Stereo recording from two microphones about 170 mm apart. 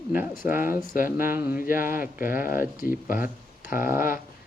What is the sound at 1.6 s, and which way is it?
Speech, 55° left (ahead or behind).